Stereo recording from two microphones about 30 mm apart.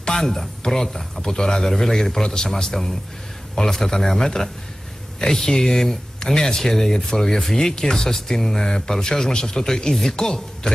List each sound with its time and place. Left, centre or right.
0.0 s a sound: left
0.3 s speech: centre
2.2 s a man's voice: left
2.7 s a man's voice: centre